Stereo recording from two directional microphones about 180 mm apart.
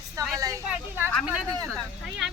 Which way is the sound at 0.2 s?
20° right (ahead or behind).